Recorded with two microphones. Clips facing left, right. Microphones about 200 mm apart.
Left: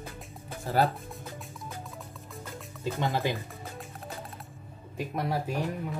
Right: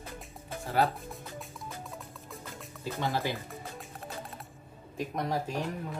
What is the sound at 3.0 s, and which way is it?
Speech, 20° left (ahead or behind).